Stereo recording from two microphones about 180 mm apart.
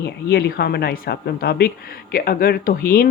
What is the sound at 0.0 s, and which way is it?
Speech, 65° left (ahead or behind).